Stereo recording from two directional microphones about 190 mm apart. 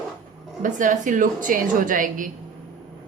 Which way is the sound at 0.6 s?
40° right (ahead or behind).